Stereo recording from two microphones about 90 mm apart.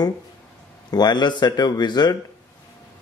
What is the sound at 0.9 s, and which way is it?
Speech, 55° left (ahead or behind).